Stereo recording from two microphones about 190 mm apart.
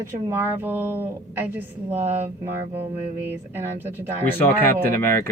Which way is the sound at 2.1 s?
10° right (ahead or behind).